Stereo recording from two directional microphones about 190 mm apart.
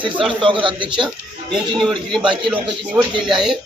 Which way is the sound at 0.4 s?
25° right (ahead or behind).